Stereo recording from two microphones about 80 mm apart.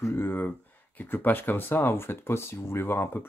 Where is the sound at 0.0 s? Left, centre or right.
Left.